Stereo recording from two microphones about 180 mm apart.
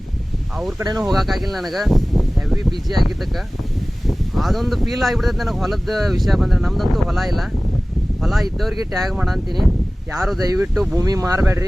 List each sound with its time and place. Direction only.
0.5 s speech: centre (ahead or behind)
0.8 s speech: 20° right (ahead or behind)
1.0 s speech: centre (ahead or behind)
10.4 s speech: 20° right (ahead or behind)